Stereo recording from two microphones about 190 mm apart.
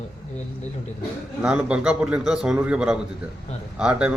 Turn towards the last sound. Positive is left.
turn(degrees=-5)  # may be behind; listen again after turning